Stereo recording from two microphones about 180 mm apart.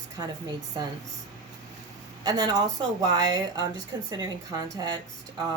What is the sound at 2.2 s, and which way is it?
Speech, 20° right (ahead or behind).